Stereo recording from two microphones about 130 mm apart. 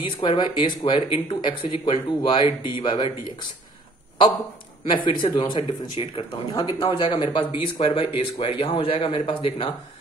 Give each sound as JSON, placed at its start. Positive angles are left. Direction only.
{"t": 0.2, "sound": "speech", "side_deg": 40}
{"t": 4.8, "sound": "speech", "side_deg": 35}